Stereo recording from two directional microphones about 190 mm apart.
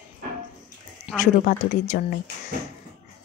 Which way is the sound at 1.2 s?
40° left (ahead or behind).